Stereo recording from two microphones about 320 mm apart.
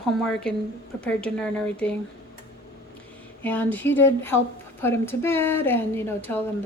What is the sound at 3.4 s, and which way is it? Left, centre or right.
A woman's voice, centre.